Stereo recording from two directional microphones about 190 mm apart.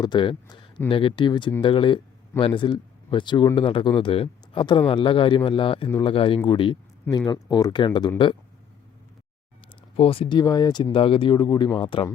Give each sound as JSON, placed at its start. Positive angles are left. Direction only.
{"t": 0.0, "sound": "speech", "side_deg": 25}
{"t": 10.0, "sound": "speech", "side_deg": 30}